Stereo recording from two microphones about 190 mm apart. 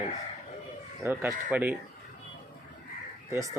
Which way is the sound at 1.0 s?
15° right (ahead or behind).